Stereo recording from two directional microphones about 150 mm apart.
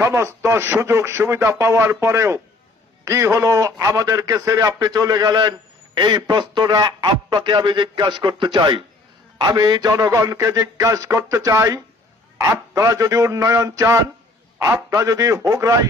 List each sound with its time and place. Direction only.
0.0 s speech: 15° right (ahead or behind)